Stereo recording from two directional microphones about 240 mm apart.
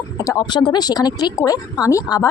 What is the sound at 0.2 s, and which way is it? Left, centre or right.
Speech, centre.